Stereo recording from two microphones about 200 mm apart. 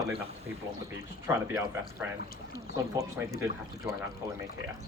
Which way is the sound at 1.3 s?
15° right (ahead or behind).